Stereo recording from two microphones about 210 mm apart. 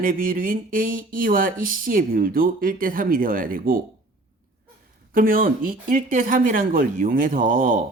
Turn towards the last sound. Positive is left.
turn(degrees=-40)  # may be behind; listen again after turning